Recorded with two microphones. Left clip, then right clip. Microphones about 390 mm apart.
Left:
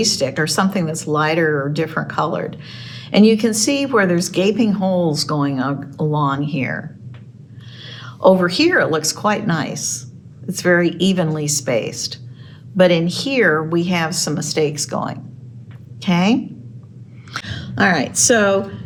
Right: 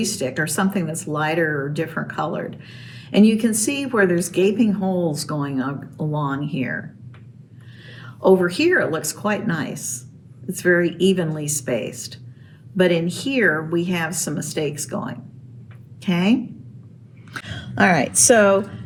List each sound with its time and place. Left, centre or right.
0.0 s speech: centre
7.8 s a woman's voice: centre
17.7 s a woman's voice: centre